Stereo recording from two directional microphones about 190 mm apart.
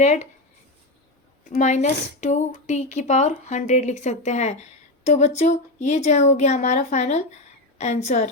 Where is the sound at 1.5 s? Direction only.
40° left (ahead or behind).